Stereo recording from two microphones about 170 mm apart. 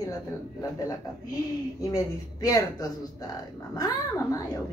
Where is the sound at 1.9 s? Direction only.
20° left (ahead or behind).